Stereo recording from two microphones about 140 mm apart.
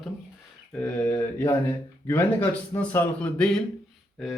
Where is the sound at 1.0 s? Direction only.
15° left (ahead or behind).